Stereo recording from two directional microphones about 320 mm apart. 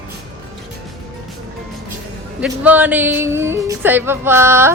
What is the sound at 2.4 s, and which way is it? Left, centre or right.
Music, centre.